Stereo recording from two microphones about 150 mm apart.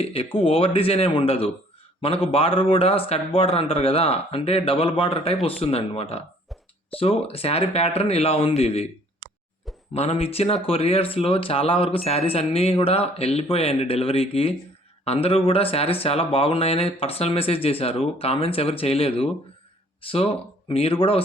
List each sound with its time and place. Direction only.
0.0 s speech: 40° left (ahead or behind)
9.2 s plop: 90° right
9.9 s speech: 45° left (ahead or behind)